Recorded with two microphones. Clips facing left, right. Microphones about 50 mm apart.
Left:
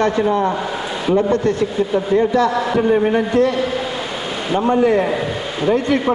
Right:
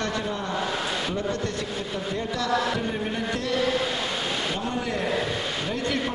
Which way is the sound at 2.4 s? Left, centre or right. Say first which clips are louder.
Left 9 dB; left.